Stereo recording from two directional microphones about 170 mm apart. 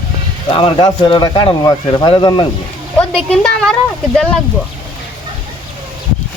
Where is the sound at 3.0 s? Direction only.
5° left (ahead or behind).